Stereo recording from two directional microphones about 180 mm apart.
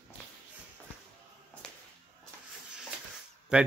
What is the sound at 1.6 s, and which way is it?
Whip, 5° left (ahead or behind).